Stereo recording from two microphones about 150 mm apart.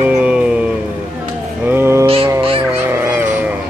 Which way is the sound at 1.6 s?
15° right (ahead or behind).